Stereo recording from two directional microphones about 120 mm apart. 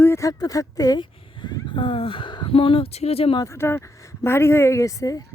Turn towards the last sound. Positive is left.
turn(degrees=30)  # may be behind; listen again after turning